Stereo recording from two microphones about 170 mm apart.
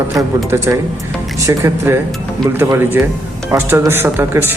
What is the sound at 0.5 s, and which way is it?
Speech, 15° right (ahead or behind).